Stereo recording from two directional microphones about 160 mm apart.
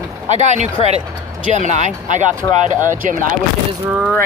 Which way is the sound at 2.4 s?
20° left (ahead or behind).